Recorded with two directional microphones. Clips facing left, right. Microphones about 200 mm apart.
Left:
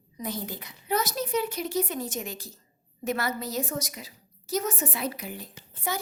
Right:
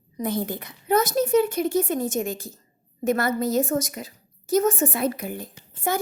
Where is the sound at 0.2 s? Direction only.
55° right (ahead or behind).